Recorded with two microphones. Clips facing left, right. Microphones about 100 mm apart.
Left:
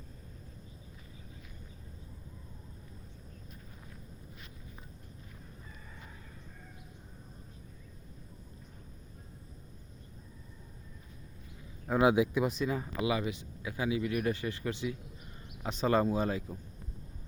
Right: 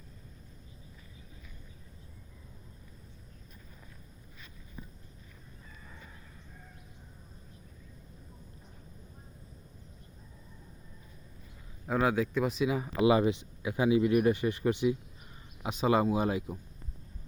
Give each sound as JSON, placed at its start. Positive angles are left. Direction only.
{"t": 11.9, "sound": "speech", "side_deg": 15}
{"t": 13.0, "sound": "speech", "side_deg": -25}
{"t": 15.6, "sound": "speech", "side_deg": -10}